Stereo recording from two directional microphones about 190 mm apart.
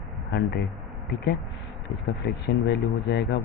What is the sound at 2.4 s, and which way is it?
Speech, 65° left (ahead or behind).